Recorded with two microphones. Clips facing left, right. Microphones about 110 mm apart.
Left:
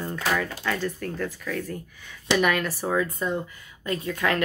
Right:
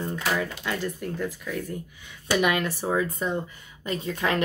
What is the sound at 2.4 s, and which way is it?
Speech, 15° right (ahead or behind).